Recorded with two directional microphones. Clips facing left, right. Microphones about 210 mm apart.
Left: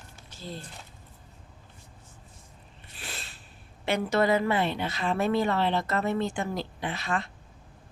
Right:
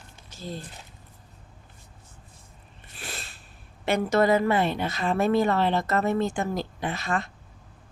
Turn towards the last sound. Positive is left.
turn(degrees=-45)  # may be behind; listen again after turning